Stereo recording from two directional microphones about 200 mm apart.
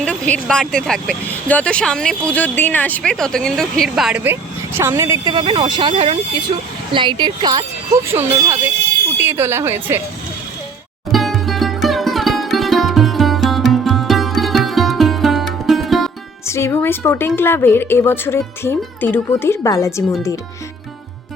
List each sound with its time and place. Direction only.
0.0 s speech: 5° left (ahead or behind); by 10.0 s 10° right (ahead or behind)
11.1 s sitar: centre (ahead or behind)
16.5 s a woman's voice: 15° left (ahead or behind)